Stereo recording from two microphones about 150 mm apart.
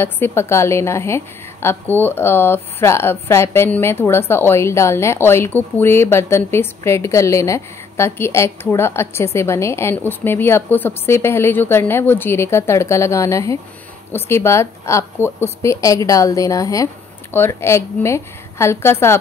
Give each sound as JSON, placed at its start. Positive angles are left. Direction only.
{"t": 0.0, "sound": "a woman's voice", "side_deg": 15}